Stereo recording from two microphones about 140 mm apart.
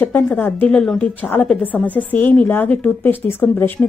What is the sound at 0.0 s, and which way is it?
A woman's voice, 10° left (ahead or behind).